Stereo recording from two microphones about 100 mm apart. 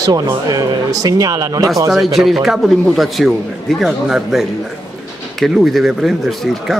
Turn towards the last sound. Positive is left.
turn(degrees=0)  # may be behind; listen again after turning